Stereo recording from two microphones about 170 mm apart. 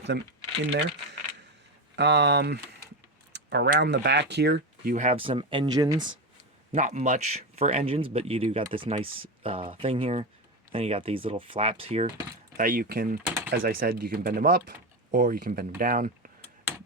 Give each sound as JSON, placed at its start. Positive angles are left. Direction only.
{"t": 2.0, "sound": "speech", "side_deg": -90}
{"t": 3.3, "sound": "a sound", "side_deg": -90}
{"t": 3.8, "sound": "speech", "side_deg": -90}
{"t": 4.9, "sound": "speech", "side_deg": -35}
{"t": 6.7, "sound": "speech", "side_deg": -45}
{"t": 12.5, "sound": "speech", "side_deg": -55}